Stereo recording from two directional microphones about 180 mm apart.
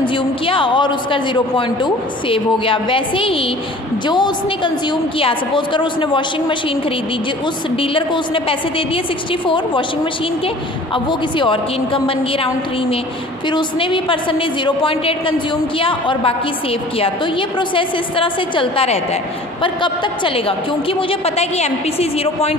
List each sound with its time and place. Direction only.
0.0 s a woman's voice: 30° left (ahead or behind)
7.7 s a woman's voice: 30° left (ahead or behind)
11.1 s a woman's voice: 30° left (ahead or behind)
13.5 s a woman's voice: 25° left (ahead or behind)